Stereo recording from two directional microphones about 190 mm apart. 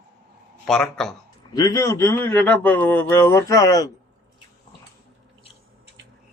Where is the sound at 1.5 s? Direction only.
15° left (ahead or behind).